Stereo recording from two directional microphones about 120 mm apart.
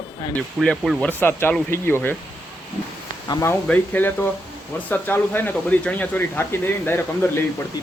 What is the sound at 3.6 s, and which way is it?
Speech, 15° left (ahead or behind).